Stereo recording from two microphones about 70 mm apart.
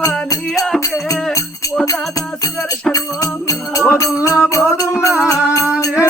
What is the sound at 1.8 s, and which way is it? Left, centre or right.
Music, left.